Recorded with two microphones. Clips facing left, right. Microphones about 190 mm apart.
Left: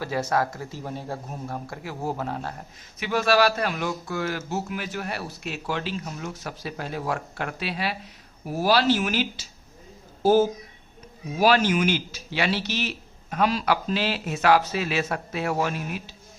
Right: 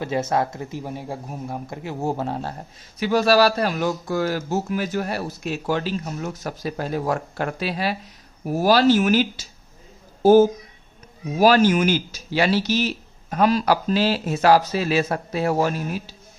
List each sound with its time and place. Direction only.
0.0 s speech: 20° right (ahead or behind); by 9.5 s 45° right (ahead or behind)
11.3 s speech: 40° right (ahead or behind)